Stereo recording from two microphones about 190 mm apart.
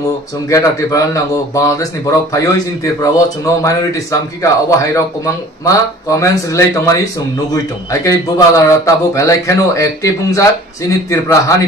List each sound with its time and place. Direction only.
0.5 s a man's voice: 15° left (ahead or behind)